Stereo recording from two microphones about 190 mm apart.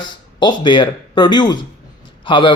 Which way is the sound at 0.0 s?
25° left (ahead or behind).